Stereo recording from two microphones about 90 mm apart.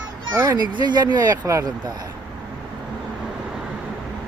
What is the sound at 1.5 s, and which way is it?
Speech, 35° right (ahead or behind).